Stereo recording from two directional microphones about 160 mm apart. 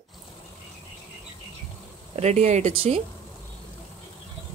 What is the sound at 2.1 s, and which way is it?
Speech, 45° right (ahead or behind).